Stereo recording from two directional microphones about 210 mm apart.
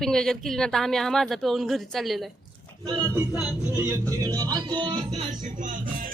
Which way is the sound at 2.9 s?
15° right (ahead or behind).